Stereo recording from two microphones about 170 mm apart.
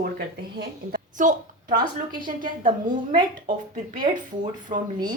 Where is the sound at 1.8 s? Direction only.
25° right (ahead or behind).